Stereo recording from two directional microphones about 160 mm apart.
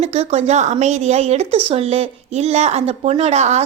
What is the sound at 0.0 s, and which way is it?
A woman's voice, 40° right (ahead or behind).